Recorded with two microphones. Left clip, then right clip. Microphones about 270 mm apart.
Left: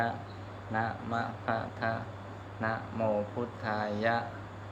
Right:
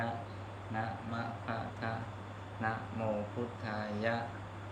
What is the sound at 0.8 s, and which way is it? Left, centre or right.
Speech, centre.